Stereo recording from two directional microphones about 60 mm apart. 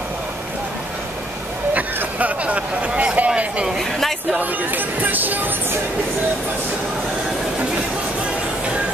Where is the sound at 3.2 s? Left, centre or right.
Centre.